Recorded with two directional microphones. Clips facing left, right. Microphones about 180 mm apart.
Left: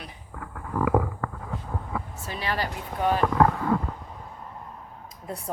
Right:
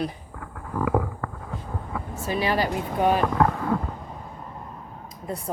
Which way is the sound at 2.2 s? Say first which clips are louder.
Right 8 dB; 10° right (ahead or behind).